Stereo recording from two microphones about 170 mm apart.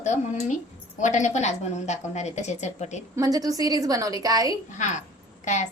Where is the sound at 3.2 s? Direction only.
20° right (ahead or behind).